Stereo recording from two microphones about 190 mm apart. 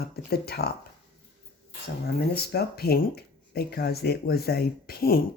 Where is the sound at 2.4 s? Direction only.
55° left (ahead or behind).